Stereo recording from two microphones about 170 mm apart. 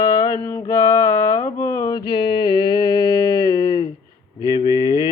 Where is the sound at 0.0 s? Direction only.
20° left (ahead or behind).